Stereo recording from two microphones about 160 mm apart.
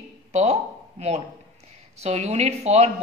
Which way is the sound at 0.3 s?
45° right (ahead or behind).